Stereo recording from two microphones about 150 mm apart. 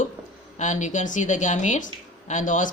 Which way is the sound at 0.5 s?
55° left (ahead or behind).